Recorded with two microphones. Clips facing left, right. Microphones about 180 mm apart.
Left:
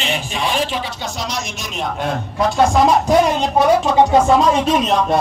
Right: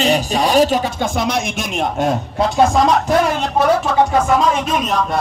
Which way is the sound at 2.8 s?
15° left (ahead or behind).